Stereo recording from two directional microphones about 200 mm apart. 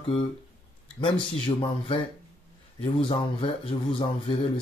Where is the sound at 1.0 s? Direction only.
25° left (ahead or behind).